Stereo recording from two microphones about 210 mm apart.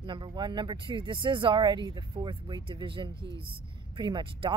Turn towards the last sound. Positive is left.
turn(degrees=-20)  # may be behind; listen again after turning